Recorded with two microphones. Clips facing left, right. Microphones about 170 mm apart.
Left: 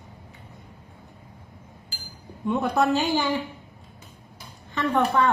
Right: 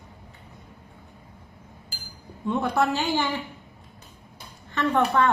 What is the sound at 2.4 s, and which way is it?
Speech, 15° left (ahead or behind).